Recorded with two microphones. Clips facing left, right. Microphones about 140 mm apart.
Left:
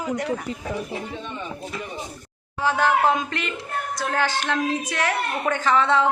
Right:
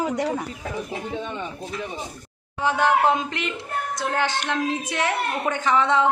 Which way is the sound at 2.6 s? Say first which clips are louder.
Even; 20° right (ahead or behind).